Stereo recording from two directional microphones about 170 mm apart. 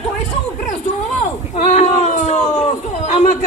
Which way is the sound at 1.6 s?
45° left (ahead or behind).